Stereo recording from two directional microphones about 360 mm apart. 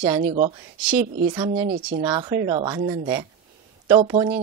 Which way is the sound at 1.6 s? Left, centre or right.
Right.